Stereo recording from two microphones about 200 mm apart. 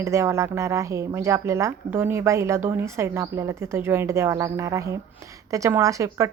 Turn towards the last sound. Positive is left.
turn(degrees=-15)  # may be behind; listen again after turning